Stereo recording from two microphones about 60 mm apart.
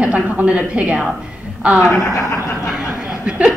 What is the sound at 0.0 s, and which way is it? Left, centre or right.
A woman's voice, right.